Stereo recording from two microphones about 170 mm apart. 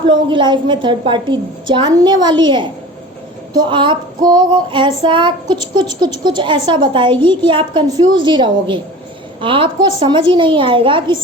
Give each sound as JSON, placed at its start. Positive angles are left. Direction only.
{"t": 0.0, "sound": "child singing", "side_deg": -30}